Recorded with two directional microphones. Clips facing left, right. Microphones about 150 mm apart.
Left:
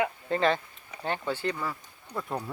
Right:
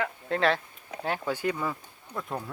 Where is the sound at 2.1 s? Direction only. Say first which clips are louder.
Left 1 dB; centre (ahead or behind).